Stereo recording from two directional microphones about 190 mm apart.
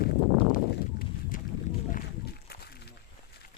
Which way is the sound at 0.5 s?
45° left (ahead or behind).